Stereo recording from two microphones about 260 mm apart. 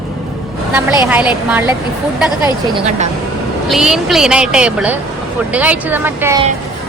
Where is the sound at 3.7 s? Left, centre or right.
Centre.